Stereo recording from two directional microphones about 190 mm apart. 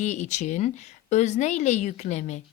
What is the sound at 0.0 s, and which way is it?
A woman's voice, 40° left (ahead or behind).